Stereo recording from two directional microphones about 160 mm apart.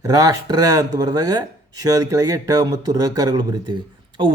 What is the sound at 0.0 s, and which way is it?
Speech, 20° right (ahead or behind).